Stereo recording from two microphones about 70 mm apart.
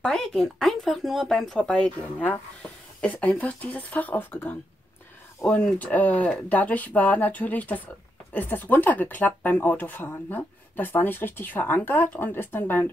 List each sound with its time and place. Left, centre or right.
0.0 s speech: centre
1.6 s speech: centre
5.4 s speech: centre